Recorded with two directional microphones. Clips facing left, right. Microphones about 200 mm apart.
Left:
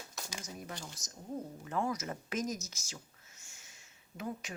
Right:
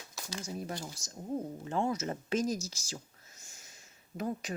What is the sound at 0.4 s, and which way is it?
Speech, 30° right (ahead or behind).